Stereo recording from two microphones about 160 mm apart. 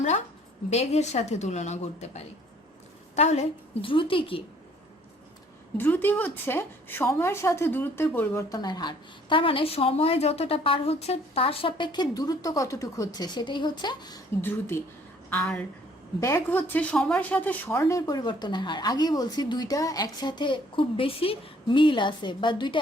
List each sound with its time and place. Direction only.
0.7 s a woman's voice: 45° left (ahead or behind)
5.7 s a woman's voice: 10° left (ahead or behind)
15.3 s a woman's voice: 5° left (ahead or behind); by 22.8 s 30° left (ahead or behind)